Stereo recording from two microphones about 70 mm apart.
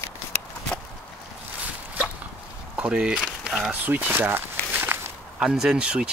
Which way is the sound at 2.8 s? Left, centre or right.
Centre.